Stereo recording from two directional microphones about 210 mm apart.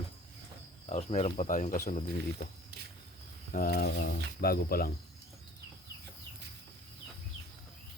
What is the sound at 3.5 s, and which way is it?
Speech, 45° left (ahead or behind).